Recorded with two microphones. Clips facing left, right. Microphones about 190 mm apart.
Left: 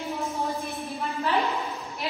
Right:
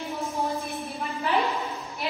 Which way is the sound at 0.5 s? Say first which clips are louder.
Even; centre (ahead or behind).